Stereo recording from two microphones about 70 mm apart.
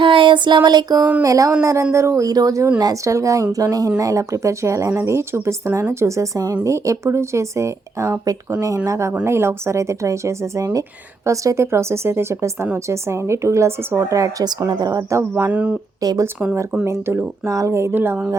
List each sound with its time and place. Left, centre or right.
0.3 s a sound: right
1.2 s speech: right
2.3 s speech: right
8.2 s speech: right
8.9 s a woman's voice: right
14.7 s a woman's voice: right
15.4 s speech: right
16.0 s speech: right
16.8 s a woman's voice: right